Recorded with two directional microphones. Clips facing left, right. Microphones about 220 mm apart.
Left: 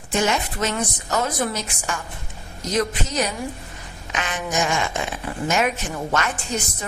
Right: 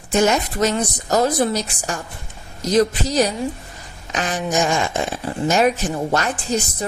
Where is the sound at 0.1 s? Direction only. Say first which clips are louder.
Right 5 dB; 40° right (ahead or behind).